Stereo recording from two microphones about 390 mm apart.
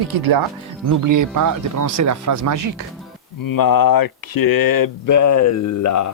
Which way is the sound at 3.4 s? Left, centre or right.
Left.